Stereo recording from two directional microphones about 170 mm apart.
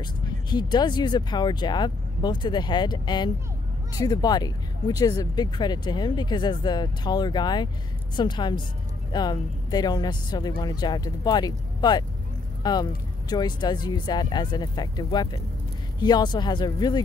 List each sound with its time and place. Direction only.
0.0 s speech: 25° left (ahead or behind)